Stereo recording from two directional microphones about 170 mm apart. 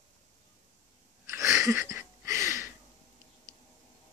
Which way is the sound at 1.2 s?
15° right (ahead or behind).